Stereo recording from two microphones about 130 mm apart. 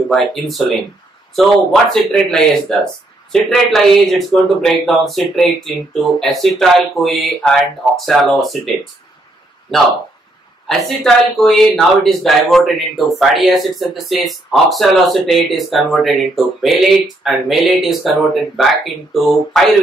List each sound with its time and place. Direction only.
0.1 s speech: centre (ahead or behind)
10.7 s speech: centre (ahead or behind)